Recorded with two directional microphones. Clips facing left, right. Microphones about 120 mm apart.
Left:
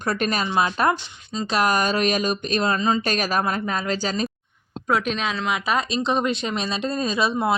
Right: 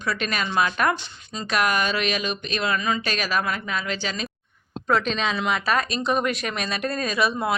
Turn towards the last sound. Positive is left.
turn(degrees=25)  # may be behind; listen again after turning